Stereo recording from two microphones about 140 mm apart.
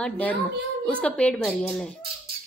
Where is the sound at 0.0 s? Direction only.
10° left (ahead or behind).